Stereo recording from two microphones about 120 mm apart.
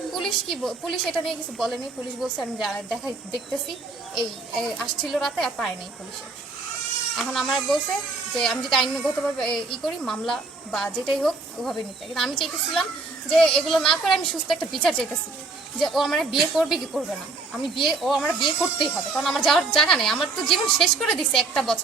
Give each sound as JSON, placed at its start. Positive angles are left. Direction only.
{"t": 0.1, "sound": "a woman's voice", "side_deg": 5}
{"t": 4.6, "sound": "a woman's voice", "side_deg": 0}
{"t": 7.2, "sound": "a woman's voice", "side_deg": 0}
{"t": 18.3, "sound": "speech", "side_deg": 40}
{"t": 18.9, "sound": "a woman's voice", "side_deg": 0}